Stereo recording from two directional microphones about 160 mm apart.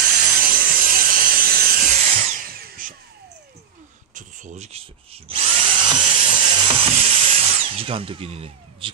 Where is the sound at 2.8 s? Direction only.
55° right (ahead or behind).